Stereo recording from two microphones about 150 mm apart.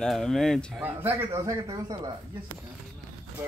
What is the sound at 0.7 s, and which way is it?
A man's voice, 10° right (ahead or behind).